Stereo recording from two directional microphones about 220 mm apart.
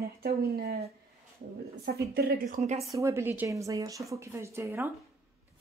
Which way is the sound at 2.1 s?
45° right (ahead or behind).